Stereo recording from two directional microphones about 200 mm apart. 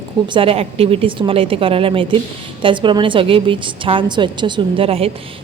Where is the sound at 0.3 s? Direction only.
30° right (ahead or behind).